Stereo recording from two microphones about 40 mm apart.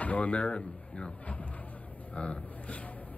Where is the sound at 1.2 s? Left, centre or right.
Left.